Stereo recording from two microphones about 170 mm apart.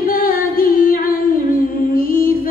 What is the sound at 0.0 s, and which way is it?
Singing, 60° left (ahead or behind).